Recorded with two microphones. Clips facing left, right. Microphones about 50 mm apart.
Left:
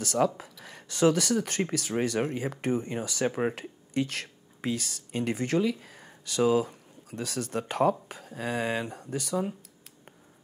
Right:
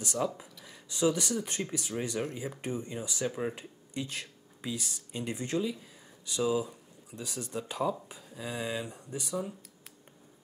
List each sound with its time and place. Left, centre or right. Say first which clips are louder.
0.0 s speech: left 6 dB; left
3.5 s speech: left 8 dB; left